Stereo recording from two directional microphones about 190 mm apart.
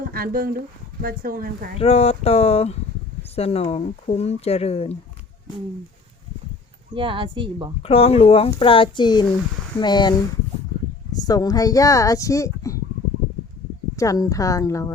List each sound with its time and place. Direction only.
0.1 s speech: 50° right (ahead or behind)
1.8 s speech: 35° left (ahead or behind)
6.9 s speech: 25° right (ahead or behind)
7.8 s speech: 30° left (ahead or behind)
13.9 s speech: 15° left (ahead or behind)